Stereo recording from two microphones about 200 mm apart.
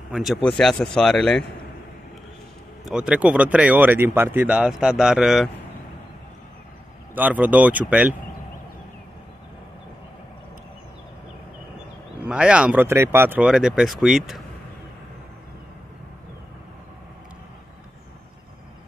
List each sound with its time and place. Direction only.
0.1 s speech: centre (ahead or behind)
2.8 s speech: 5° right (ahead or behind)
7.2 s speech: 10° right (ahead or behind)
12.3 s speech: 5° right (ahead or behind)